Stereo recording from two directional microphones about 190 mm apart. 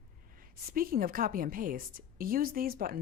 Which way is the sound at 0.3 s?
50° right (ahead or behind).